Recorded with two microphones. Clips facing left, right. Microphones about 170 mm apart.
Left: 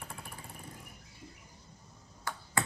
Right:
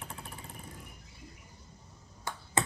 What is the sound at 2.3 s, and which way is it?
Finger snapping, 20° right (ahead or behind).